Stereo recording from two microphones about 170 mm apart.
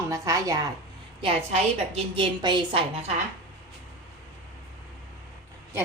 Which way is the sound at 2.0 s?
30° right (ahead or behind).